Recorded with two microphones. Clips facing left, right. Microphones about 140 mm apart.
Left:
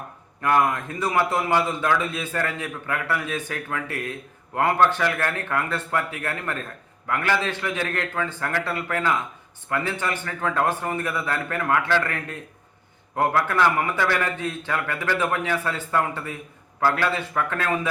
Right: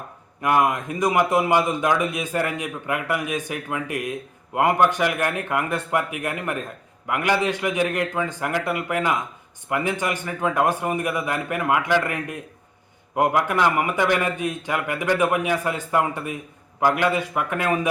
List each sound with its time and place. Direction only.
0.4 s a man's voice: 15° right (ahead or behind)